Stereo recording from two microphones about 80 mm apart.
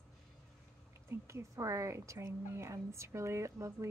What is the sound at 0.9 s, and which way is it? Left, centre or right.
Speech, right.